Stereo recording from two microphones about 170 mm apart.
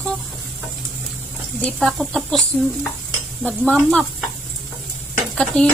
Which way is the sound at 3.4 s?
5° left (ahead or behind).